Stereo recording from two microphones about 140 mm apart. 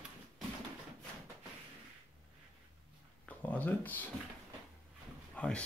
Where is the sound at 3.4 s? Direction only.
10° left (ahead or behind).